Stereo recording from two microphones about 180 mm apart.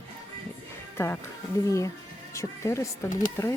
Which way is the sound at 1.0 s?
15° left (ahead or behind).